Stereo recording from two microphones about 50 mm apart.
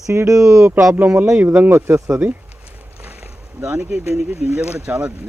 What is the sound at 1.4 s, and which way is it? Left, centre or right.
Speech, right.